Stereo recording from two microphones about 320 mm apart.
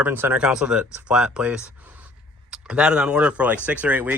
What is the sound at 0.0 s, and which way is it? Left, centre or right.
Speech, centre.